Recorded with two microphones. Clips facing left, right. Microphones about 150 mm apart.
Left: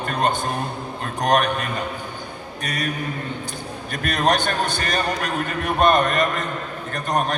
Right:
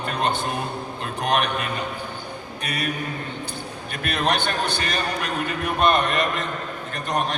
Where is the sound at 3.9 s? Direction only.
45° left (ahead or behind).